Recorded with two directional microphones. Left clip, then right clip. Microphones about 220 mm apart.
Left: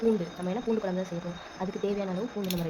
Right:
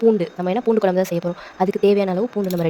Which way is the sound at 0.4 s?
40° right (ahead or behind).